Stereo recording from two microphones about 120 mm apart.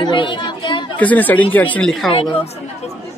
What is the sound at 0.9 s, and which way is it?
Speech, 15° left (ahead or behind).